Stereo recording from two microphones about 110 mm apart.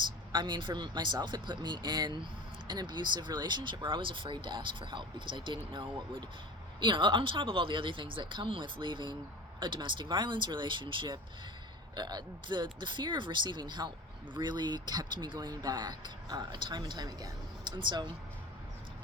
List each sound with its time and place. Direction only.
0.3 s speech: 45° right (ahead or behind)